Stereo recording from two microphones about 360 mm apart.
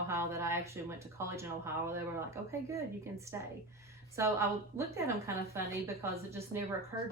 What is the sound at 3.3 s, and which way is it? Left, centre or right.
Speech, centre.